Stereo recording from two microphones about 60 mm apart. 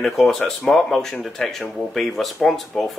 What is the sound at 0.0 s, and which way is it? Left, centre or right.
Speech, centre.